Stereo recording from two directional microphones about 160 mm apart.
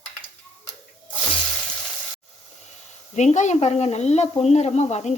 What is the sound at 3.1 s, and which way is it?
Speech, 45° left (ahead or behind).